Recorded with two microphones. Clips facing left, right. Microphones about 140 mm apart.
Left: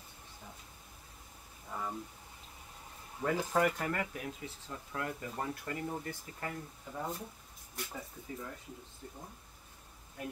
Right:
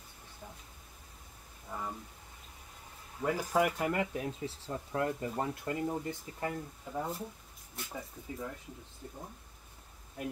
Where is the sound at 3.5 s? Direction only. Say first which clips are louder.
Right 3 dB; 10° right (ahead or behind).